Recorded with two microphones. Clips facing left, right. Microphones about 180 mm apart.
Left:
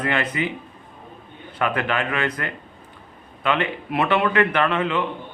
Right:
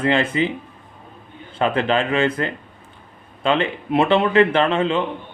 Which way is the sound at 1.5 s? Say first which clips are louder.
Right 4 dB; 25° right (ahead or behind).